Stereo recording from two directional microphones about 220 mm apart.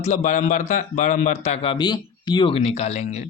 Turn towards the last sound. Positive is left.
turn(degrees=30)  # may be behind; listen again after turning